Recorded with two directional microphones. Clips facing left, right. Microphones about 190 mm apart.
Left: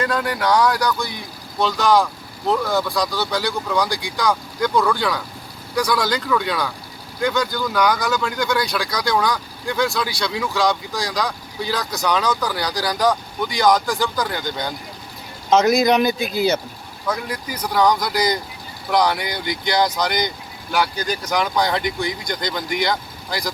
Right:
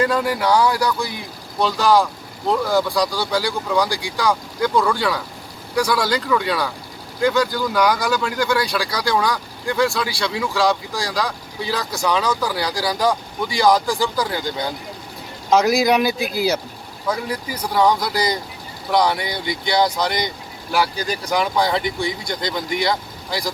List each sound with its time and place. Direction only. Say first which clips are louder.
0.0 s speech: right 2 dB; 5° right (ahead or behind)
13.7 s speech: right 1 dB; 30° right (ahead or behind)
14.0 s speech: right 1 dB; 5° right (ahead or behind)
21.2 s speech: right 1 dB; 5° right (ahead or behind)
21.8 s speech: even; 30° right (ahead or behind)
22.3 s speech: right 1 dB; centre (ahead or behind)